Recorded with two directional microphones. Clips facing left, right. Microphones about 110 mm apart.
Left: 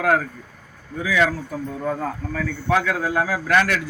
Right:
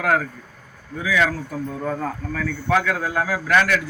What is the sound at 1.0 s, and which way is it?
Speech, 25° left (ahead or behind).